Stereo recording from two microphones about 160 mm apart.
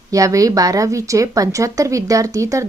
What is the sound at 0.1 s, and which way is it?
A woman's voice, 20° right (ahead or behind).